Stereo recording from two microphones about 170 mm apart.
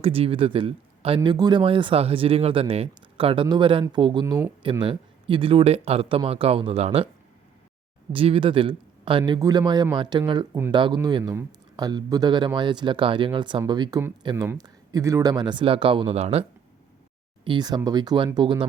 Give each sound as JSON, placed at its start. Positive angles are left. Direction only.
{"t": 0.0, "sound": "speech", "side_deg": -35}
{"t": 8.1, "sound": "a man's voice", "side_deg": -30}
{"t": 17.4, "sound": "a man's voice", "side_deg": -25}